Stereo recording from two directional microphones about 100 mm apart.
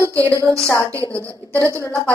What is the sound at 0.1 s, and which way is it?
A woman's voice, 30° right (ahead or behind).